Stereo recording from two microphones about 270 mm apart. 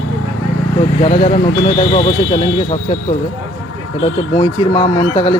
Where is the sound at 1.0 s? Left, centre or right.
Left.